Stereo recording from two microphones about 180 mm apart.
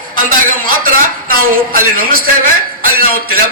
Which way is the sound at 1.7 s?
55° right (ahead or behind).